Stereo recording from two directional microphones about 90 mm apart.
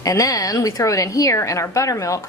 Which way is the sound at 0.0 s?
40° left (ahead or behind).